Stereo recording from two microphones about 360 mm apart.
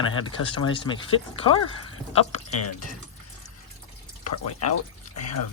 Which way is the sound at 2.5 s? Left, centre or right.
Left.